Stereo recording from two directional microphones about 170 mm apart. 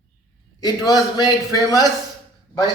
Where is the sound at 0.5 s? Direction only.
25° left (ahead or behind).